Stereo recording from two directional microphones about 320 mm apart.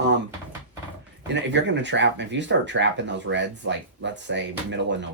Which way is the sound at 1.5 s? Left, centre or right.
Right.